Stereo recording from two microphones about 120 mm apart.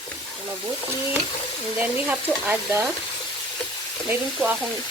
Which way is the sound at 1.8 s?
15° right (ahead or behind).